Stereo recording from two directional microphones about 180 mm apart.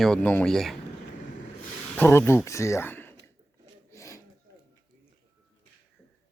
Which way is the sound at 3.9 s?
20° left (ahead or behind).